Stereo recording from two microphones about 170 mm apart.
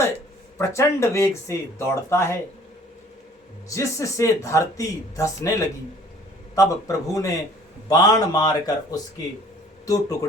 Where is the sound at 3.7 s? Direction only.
20° left (ahead or behind).